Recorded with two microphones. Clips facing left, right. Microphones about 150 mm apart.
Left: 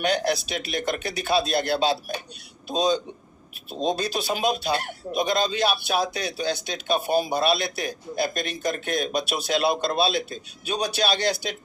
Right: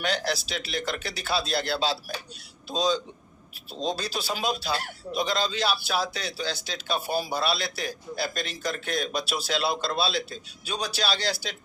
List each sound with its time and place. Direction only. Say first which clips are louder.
0.0 s a man's voice: left 5 dB; 20° left (ahead or behind)